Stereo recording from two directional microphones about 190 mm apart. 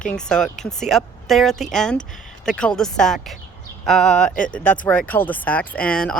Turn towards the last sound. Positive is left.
turn(degrees=5)  # may be behind; listen again after turning